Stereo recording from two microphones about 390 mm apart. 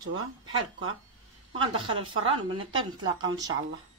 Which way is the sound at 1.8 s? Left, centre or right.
Centre.